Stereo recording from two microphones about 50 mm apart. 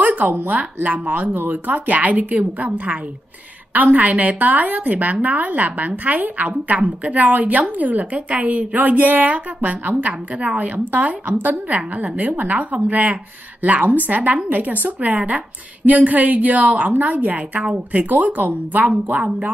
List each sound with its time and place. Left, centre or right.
0.0 s a woman's voice: right